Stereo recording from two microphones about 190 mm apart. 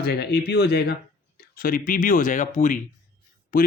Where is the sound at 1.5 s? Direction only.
45° left (ahead or behind).